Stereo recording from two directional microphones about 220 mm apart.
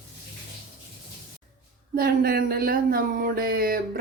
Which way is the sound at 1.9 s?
40° right (ahead or behind).